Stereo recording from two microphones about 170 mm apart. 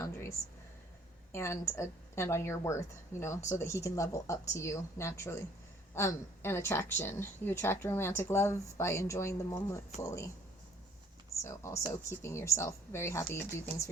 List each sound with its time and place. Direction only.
0.0 s a sound: 15° left (ahead or behind)
1.3 s a woman's voice: 15° left (ahead or behind)
11.4 s a woman's voice: 15° left (ahead or behind)